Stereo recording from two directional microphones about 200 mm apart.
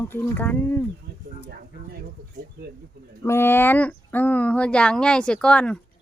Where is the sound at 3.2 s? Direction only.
10° left (ahead or behind).